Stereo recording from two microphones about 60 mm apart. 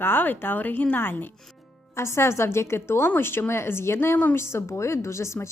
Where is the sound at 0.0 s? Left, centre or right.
Left.